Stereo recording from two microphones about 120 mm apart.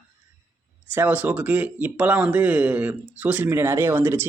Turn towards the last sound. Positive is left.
turn(degrees=-20)  # may be behind; listen again after turning